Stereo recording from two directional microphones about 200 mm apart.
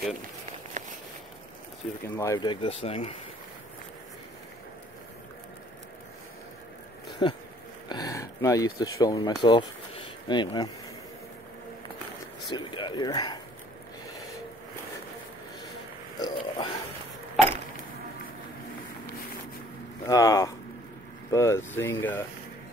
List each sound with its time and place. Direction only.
0.8 s a sound: 40° right (ahead or behind)
2.1 s speech: 15° left (ahead or behind)
7.2 s speech: 25° left (ahead or behind)
12.4 s speech: 20° left (ahead or behind)
16.2 s a sound: 20° left (ahead or behind)
20.1 s speech: 15° left (ahead or behind)